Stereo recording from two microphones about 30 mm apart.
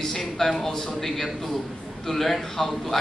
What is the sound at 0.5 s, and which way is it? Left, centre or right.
A man's voice, centre.